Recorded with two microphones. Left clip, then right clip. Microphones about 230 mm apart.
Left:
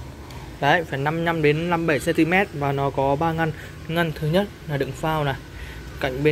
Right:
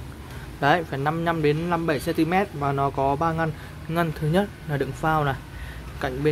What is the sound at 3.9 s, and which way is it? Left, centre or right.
A man's voice, centre.